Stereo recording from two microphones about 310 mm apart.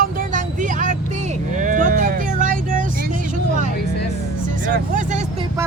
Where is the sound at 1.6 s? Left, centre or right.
Right.